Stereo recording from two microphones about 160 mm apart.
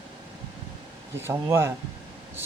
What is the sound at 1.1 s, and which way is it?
Speech, 15° right (ahead or behind).